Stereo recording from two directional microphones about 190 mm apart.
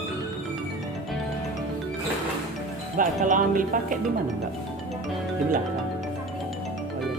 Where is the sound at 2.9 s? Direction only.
45° right (ahead or behind).